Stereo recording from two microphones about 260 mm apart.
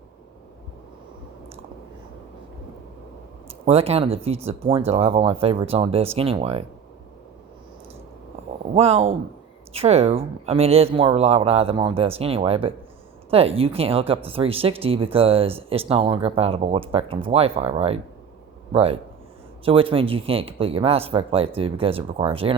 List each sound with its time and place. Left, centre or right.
3.7 s speech: right
8.7 s speech: right